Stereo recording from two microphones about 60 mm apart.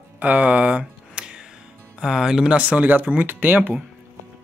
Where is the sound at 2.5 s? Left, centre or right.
Right.